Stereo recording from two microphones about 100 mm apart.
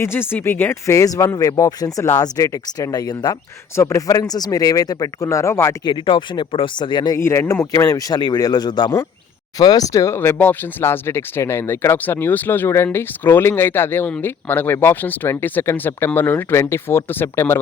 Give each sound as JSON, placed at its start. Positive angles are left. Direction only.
{"t": 0.0, "sound": "speech", "side_deg": 20}
{"t": 3.8, "sound": "speech", "side_deg": 30}
{"t": 5.8, "sound": "speech", "side_deg": 50}
{"t": 7.2, "sound": "speech", "side_deg": 25}